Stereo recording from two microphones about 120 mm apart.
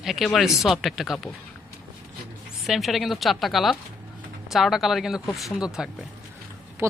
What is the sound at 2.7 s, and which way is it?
Speech, centre (ahead or behind).